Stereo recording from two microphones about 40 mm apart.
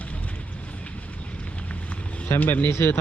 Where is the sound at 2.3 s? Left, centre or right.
Left.